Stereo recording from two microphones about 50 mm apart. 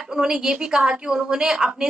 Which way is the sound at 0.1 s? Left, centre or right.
Centre.